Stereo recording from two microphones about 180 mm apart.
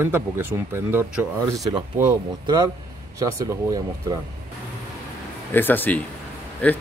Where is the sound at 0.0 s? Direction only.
10° right (ahead or behind).